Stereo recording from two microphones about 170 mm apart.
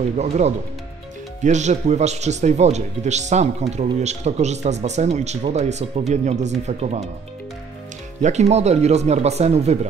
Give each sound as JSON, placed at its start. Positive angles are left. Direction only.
{"t": 1.4, "sound": "speech", "side_deg": -45}
{"t": 8.2, "sound": "speech", "side_deg": -40}